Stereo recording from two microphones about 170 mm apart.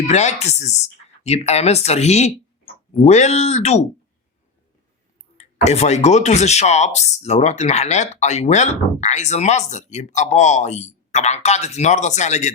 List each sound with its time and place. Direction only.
0.1 s speech: 40° left (ahead or behind)
5.4 s speech: 40° left (ahead or behind)